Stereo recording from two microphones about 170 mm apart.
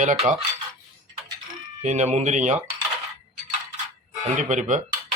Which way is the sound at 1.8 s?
45° right (ahead or behind).